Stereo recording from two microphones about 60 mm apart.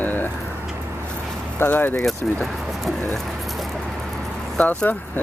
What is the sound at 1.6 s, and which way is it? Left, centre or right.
Speech, left.